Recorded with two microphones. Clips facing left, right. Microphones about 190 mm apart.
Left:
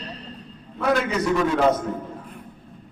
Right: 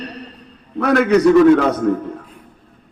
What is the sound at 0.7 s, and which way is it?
Speech, 65° right (ahead or behind).